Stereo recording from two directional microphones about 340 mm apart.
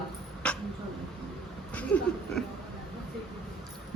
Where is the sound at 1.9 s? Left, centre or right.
Centre.